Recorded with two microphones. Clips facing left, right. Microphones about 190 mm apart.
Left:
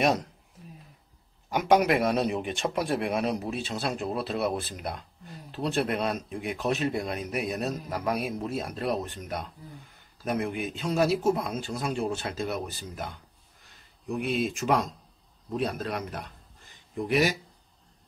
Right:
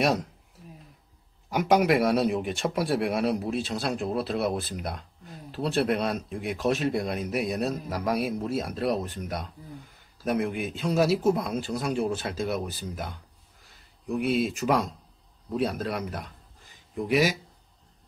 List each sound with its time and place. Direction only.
0.0 s speech: centre (ahead or behind)
1.5 s speech: centre (ahead or behind)
14.1 s speech: centre (ahead or behind)